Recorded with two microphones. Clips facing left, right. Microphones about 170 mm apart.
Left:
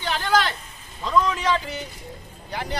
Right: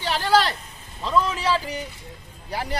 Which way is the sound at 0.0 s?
35° right (ahead or behind).